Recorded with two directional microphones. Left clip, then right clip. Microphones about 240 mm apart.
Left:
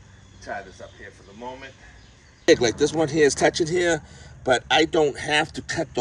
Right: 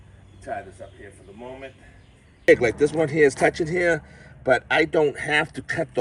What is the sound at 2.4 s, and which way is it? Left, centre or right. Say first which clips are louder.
Speech: right 1 dB; centre.